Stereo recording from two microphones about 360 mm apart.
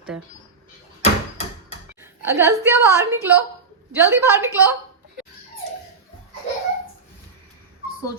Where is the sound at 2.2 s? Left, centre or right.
Centre.